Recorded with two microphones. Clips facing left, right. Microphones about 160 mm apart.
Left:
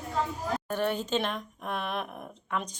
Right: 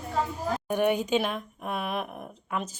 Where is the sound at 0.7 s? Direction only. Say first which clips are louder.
Right 6 dB; 15° right (ahead or behind).